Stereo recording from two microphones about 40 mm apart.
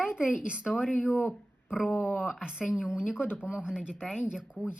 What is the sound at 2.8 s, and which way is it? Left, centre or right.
Speech, right.